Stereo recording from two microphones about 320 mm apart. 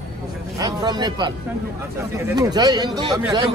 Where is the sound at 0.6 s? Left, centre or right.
Centre.